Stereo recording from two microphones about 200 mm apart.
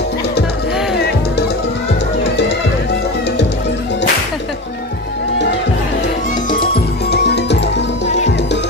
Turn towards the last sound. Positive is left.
turn(degrees=55)  # may be behind; listen again after turning